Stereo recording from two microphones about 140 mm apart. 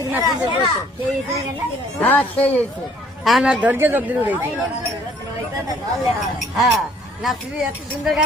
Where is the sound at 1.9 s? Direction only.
10° left (ahead or behind).